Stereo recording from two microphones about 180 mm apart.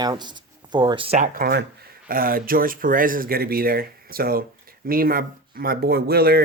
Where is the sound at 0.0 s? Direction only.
25° right (ahead or behind).